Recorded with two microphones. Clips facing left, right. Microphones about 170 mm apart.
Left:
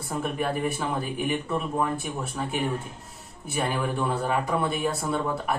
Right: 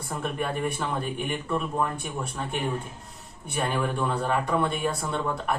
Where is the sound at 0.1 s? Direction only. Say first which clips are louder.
Left 2 dB; centre (ahead or behind).